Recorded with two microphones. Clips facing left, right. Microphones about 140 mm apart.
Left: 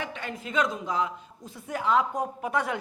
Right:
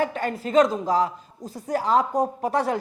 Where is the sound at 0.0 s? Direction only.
45° right (ahead or behind).